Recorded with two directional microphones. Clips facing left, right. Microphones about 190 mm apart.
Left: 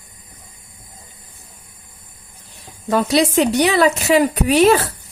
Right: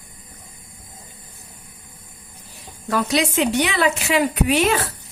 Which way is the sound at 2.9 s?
30° left (ahead or behind).